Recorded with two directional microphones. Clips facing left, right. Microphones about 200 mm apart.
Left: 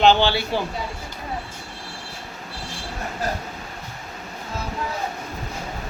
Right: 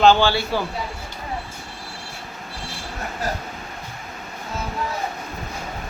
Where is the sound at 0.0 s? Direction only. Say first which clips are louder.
Right 1 dB; 20° left (ahead or behind).